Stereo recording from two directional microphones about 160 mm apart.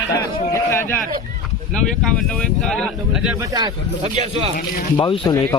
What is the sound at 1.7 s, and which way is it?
Speech, 5° left (ahead or behind).